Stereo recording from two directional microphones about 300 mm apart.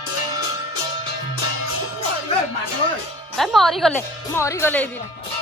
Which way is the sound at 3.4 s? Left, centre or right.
Centre.